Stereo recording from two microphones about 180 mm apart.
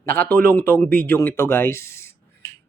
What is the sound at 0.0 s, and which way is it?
A man's voice, 10° left (ahead or behind).